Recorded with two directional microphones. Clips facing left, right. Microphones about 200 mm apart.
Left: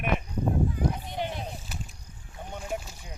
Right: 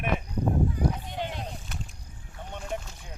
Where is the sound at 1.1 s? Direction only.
10° left (ahead or behind).